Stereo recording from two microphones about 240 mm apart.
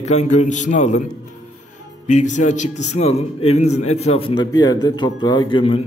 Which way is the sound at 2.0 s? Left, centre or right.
Left.